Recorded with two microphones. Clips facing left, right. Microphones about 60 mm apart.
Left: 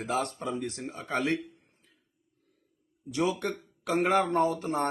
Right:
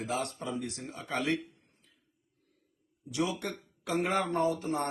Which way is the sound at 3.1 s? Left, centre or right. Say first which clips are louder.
Left 4 dB; left.